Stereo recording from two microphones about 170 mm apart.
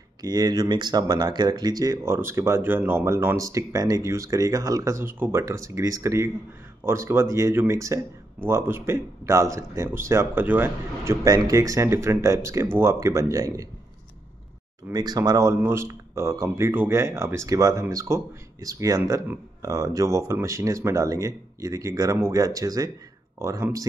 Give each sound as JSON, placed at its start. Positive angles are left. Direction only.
{"t": 0.2, "sound": "speech", "side_deg": -25}
{"t": 14.9, "sound": "speech", "side_deg": -25}